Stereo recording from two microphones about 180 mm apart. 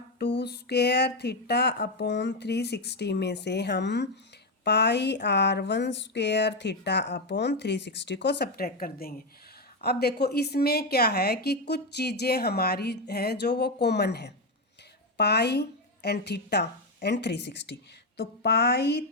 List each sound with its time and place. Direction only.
0.2 s a woman's voice: 70° left (ahead or behind)